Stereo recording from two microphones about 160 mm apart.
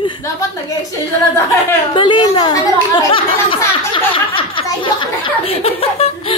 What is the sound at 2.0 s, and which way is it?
Speech, 30° left (ahead or behind).